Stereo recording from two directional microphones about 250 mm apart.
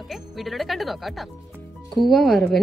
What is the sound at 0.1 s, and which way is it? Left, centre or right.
A woman's voice, centre.